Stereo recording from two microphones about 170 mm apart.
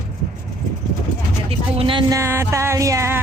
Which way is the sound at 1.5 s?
30° right (ahead or behind).